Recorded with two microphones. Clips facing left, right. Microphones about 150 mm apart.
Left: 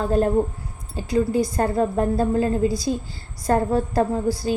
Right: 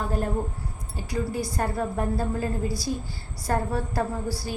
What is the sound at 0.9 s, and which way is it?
A woman's voice, 20° left (ahead or behind).